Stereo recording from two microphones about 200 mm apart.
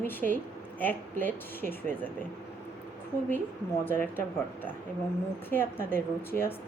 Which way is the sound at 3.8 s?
10° left (ahead or behind).